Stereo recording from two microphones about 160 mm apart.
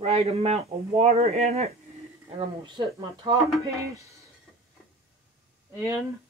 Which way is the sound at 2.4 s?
30° right (ahead or behind).